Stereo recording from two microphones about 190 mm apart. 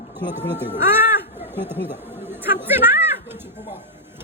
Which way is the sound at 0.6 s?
10° right (ahead or behind).